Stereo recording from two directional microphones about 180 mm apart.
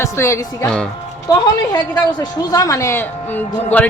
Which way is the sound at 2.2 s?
20° left (ahead or behind).